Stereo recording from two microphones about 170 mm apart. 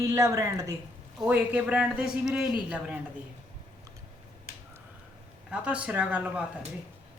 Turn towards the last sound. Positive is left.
turn(degrees=-10)  # may be behind; listen again after turning